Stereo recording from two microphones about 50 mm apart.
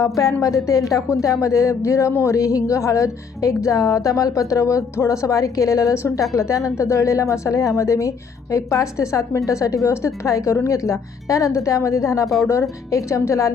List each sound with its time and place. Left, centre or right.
0.5 s speech: left
6.3 s speech: left
10.2 s speech: left